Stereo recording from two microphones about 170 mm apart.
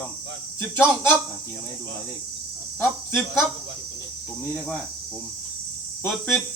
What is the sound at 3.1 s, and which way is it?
Speech, 15° left (ahead or behind).